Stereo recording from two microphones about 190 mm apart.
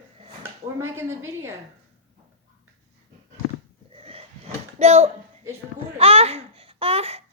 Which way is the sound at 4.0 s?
30° right (ahead or behind).